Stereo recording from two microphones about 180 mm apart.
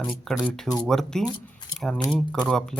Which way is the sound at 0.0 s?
Centre (ahead or behind).